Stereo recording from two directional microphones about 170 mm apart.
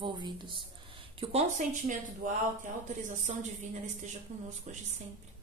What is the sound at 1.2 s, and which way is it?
Speech, 40° right (ahead or behind).